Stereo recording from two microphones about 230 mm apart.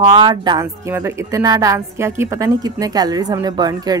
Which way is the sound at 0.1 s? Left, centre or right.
Centre.